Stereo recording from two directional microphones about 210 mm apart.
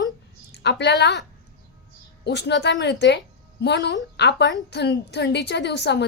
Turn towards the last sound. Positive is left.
turn(degrees=55)  # may be behind; listen again after turning